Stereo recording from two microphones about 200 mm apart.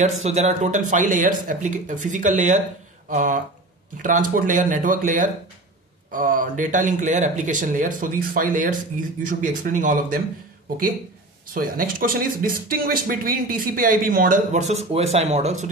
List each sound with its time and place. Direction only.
0.0 s speech: 35° right (ahead or behind)
11.5 s speech: 45° right (ahead or behind)